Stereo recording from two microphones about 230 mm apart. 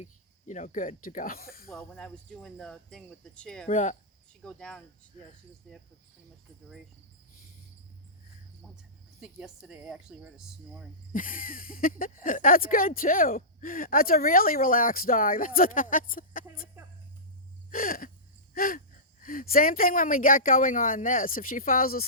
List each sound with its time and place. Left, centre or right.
0.0 s speech: left
1.7 s speech: centre
3.7 s speech: left
4.3 s speech: centre
9.2 s speech: centre
11.1 s speech: left
17.7 s a sound: left
19.2 s speech: left